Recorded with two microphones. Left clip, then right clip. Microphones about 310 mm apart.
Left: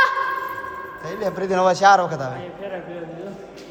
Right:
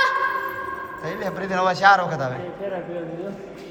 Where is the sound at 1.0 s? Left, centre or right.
Centre.